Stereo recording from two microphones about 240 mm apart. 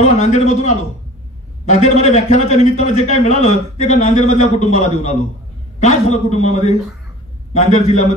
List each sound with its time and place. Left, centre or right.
0.0 s a man's voice: left